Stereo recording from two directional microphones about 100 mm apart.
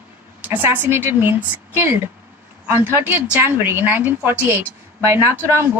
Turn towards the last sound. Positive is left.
turn(degrees=-25)  # may be behind; listen again after turning